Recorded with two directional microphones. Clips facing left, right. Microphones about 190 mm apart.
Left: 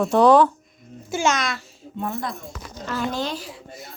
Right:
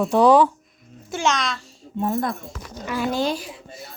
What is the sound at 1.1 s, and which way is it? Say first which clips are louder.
Speech: left 1 dB; centre (ahead or behind).